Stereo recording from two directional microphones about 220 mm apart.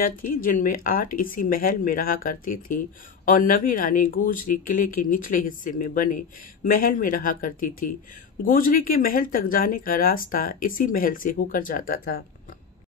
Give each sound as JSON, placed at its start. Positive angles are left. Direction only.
{"t": 0.0, "sound": "speech", "side_deg": 40}